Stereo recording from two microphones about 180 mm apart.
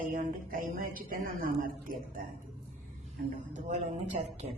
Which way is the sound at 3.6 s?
40° right (ahead or behind).